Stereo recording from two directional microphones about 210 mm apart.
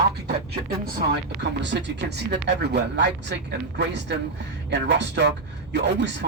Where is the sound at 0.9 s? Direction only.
55° right (ahead or behind).